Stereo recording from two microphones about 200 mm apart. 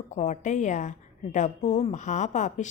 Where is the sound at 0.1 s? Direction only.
35° left (ahead or behind).